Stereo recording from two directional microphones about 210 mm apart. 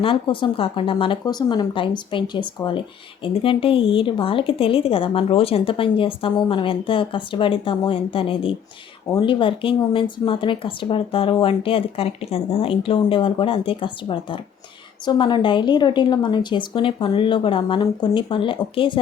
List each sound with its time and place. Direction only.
0.0 s speech: 25° left (ahead or behind)